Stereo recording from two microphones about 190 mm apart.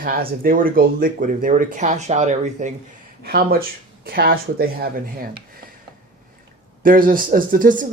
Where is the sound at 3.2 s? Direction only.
55° right (ahead or behind).